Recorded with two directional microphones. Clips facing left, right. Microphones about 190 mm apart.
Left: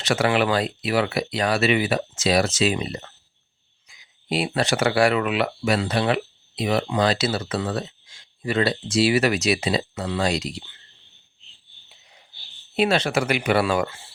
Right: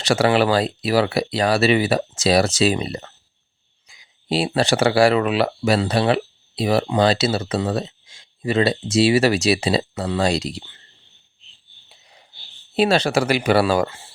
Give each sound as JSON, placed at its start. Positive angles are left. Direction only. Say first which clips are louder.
{"t": 0.0, "sound": "speech", "louder": "right 4 dB", "side_deg": -35}
{"t": 12.7, "sound": "speech", "louder": "right 3 dB", "side_deg": -35}